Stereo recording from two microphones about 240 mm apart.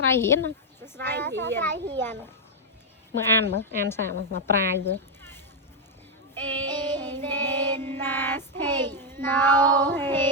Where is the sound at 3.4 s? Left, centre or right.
Right.